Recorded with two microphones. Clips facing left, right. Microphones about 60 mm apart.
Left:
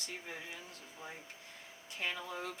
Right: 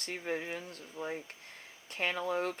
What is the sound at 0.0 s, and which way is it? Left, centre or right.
Speech, right.